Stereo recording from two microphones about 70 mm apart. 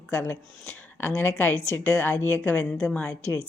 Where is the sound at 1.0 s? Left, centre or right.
Left.